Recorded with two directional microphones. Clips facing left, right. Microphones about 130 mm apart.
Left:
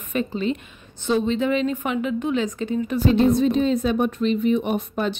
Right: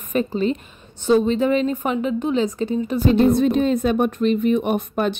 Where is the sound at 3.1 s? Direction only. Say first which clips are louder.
Right 2 dB; 55° right (ahead or behind).